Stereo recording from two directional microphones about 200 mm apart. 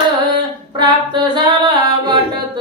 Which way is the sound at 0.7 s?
20° right (ahead or behind).